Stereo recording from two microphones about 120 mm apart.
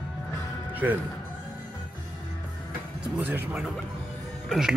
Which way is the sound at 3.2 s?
15° right (ahead or behind).